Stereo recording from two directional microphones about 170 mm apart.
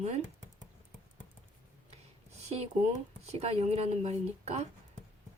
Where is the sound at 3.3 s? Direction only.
35° right (ahead or behind).